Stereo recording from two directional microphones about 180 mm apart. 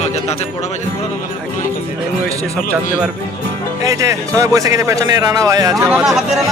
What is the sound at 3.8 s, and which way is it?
Speech, 15° right (ahead or behind).